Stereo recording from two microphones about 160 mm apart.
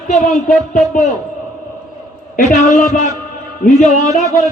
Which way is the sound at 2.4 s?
50° left (ahead or behind).